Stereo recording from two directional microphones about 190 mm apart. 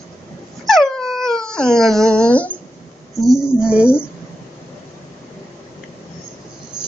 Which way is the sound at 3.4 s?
5° right (ahead or behind).